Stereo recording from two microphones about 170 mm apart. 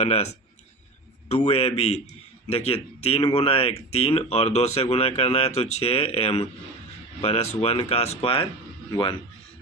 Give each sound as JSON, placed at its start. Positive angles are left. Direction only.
{"t": 0.0, "sound": "speech", "side_deg": 40}
{"t": 1.5, "sound": "speech", "side_deg": 35}